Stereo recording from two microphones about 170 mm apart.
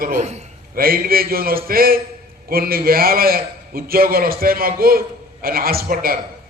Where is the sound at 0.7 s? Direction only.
60° right (ahead or behind).